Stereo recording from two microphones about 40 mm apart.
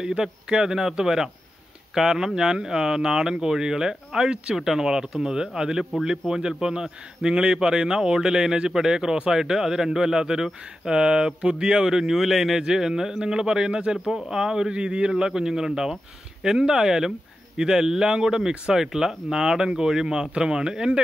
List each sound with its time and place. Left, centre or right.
0.0 s a man's voice: centre